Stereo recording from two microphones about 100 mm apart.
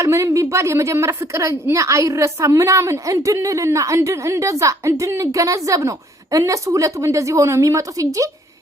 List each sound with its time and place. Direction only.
0.0 s a woman's voice: 30° right (ahead or behind)